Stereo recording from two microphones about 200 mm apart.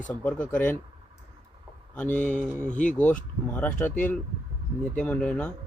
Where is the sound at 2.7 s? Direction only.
40° left (ahead or behind).